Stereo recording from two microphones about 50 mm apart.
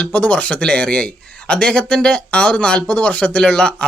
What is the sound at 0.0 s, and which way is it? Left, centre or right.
Speech, left.